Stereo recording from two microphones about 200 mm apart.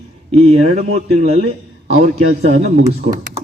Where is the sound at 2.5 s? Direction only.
40° right (ahead or behind).